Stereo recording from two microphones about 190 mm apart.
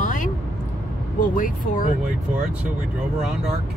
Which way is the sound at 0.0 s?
45° left (ahead or behind).